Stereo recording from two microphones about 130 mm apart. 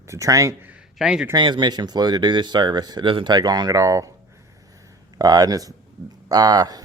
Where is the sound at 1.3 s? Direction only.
35° right (ahead or behind).